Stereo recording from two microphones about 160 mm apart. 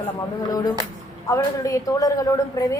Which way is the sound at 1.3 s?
20° left (ahead or behind).